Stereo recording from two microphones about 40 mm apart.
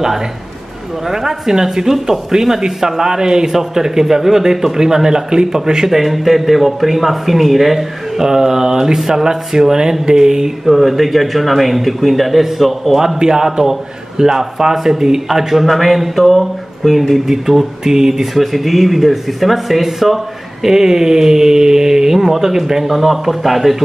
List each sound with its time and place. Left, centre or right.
1.0 s speech: centre
5.9 s speech: centre
10.7 s speech: centre
13.2 s speech: centre